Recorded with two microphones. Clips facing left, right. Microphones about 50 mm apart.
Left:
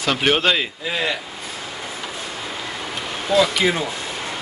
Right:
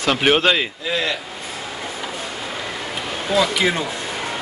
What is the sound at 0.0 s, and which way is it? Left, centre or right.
Speech, centre.